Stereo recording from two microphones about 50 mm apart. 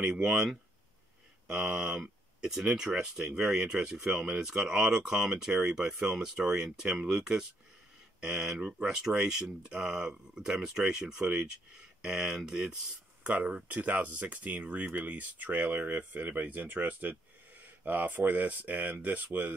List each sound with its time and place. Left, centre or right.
0.0 s speech: centre
1.5 s speech: centre
2.0 s a sound: centre
3.3 s speech: centre
9.0 s speech: centre
13.7 s speech: right